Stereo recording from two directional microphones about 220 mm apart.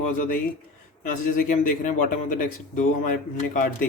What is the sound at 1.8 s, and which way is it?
Speech, 35° left (ahead or behind).